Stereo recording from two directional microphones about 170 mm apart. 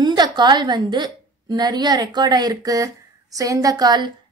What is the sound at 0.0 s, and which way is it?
A woman's voice, 25° right (ahead or behind).